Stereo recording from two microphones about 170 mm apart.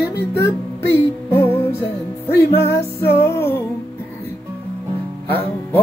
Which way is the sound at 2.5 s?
75° left (ahead or behind).